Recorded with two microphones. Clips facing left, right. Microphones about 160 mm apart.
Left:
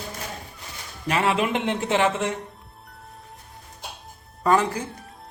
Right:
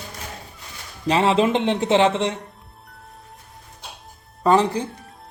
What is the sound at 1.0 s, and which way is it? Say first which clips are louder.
A man's voice: right 5 dB; 25° right (ahead or behind).